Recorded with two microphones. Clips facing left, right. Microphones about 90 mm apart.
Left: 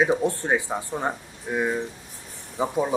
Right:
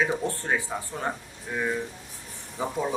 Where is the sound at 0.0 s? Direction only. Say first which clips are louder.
Left 5 dB; 20° left (ahead or behind).